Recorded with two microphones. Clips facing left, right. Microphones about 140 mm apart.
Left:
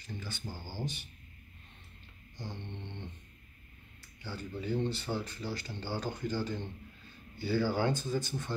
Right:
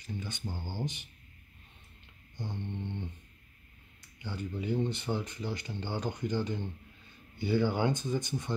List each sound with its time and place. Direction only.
0.2 s speech: 20° right (ahead or behind)
2.4 s speech: 10° right (ahead or behind)